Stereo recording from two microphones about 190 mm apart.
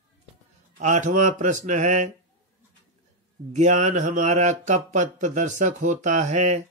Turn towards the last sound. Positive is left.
turn(degrees=-40)  # may be behind; listen again after turning